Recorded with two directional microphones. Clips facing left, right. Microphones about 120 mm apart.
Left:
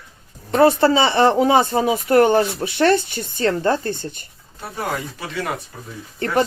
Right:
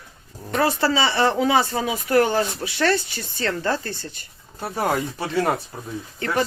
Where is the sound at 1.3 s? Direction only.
35° left (ahead or behind).